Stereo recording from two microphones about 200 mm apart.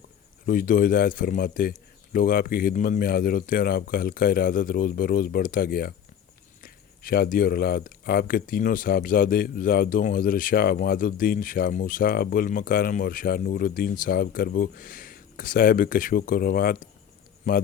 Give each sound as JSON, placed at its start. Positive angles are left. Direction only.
{"t": 0.4, "sound": "speech", "side_deg": 45}